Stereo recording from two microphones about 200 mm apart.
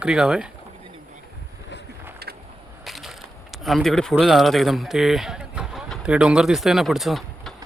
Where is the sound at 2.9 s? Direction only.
Centre (ahead or behind).